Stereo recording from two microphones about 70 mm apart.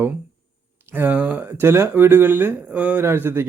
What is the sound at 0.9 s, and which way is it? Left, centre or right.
Speech, right.